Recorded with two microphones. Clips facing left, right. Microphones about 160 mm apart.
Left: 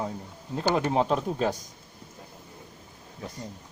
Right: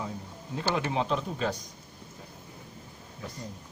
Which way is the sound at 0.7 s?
45° left (ahead or behind).